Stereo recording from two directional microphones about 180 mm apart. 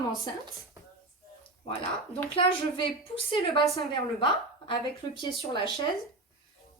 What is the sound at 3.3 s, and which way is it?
Speech, 30° left (ahead or behind).